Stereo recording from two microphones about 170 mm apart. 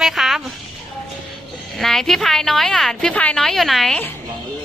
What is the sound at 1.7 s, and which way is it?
A woman's voice, centre (ahead or behind).